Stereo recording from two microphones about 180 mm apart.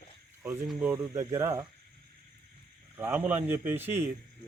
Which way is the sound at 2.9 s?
15° right (ahead or behind).